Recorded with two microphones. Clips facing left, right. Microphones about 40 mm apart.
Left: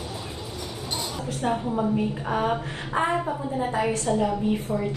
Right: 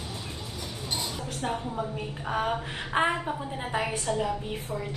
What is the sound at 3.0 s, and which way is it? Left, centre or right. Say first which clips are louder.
Speech: even; right.